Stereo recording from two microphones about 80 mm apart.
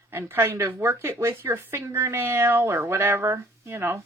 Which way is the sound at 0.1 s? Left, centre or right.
Right.